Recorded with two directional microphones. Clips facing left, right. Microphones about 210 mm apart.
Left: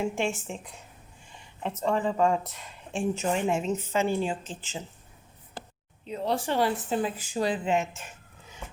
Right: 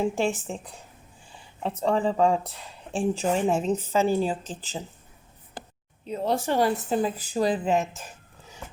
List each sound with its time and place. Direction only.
0.0 s speech: 35° right (ahead or behind)
6.1 s speech: 45° right (ahead or behind)